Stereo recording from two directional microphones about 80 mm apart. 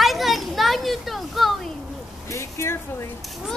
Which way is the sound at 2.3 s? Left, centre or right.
Left.